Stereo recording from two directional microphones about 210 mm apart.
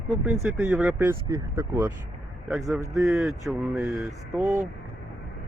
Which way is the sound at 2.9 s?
15° right (ahead or behind).